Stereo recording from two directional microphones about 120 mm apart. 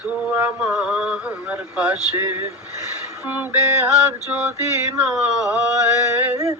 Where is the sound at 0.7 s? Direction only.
5° right (ahead or behind).